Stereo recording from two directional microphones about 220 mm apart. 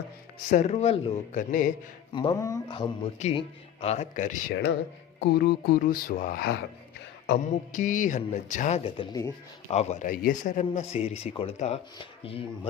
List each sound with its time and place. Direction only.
0.5 s a man's voice: 30° left (ahead or behind)
2.1 s a man's voice: 20° left (ahead or behind)
9.7 s a man's voice: 35° left (ahead or behind)